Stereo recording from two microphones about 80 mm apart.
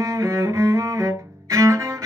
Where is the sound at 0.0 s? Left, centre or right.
Right.